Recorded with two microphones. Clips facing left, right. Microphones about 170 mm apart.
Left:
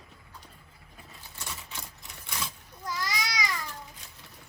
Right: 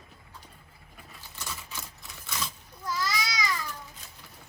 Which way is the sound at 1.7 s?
15° left (ahead or behind).